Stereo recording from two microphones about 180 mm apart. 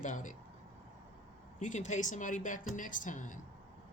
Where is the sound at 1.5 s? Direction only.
40° left (ahead or behind).